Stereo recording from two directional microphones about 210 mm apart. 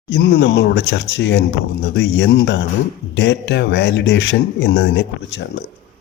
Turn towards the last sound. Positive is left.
turn(degrees=55)  # may be behind; listen again after turning